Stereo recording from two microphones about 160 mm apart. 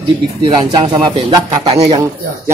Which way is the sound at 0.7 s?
25° right (ahead or behind).